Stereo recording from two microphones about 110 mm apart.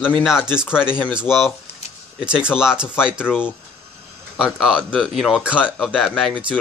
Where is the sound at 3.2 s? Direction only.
15° left (ahead or behind).